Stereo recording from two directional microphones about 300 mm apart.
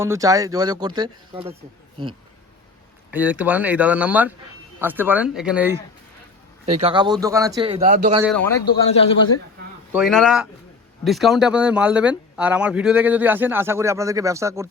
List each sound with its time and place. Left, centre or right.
0.0 s speech: centre
3.1 s speech: centre
6.8 s speech: centre
7.8 s speech: right
8.6 s a man's voice: centre
9.9 s speech: centre